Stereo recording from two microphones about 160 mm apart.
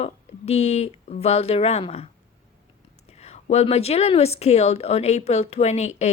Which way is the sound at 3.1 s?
40° left (ahead or behind).